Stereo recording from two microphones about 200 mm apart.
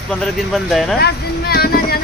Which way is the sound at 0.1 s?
Centre (ahead or behind).